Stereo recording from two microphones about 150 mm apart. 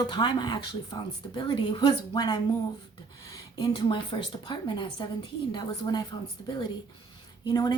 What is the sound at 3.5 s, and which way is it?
A woman's voice, 30° left (ahead or behind).